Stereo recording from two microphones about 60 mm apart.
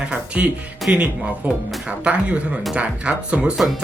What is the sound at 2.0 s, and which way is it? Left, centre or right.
Speech, centre.